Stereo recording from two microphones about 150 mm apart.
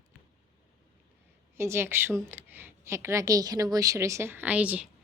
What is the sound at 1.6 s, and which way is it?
A woman's voice, 15° right (ahead or behind).